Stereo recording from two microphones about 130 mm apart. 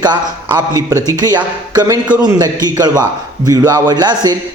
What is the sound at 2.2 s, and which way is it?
A man's voice, 30° right (ahead or behind).